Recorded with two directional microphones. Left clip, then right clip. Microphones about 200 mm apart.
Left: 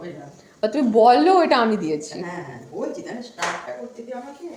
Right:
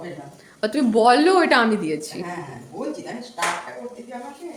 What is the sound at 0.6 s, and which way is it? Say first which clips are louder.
A woman's voice: left 2 dB; 10° right (ahead or behind).